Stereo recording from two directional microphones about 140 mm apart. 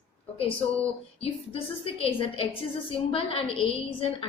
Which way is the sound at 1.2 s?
45° left (ahead or behind).